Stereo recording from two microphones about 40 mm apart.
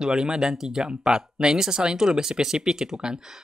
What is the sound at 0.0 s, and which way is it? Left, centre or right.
Speech, centre.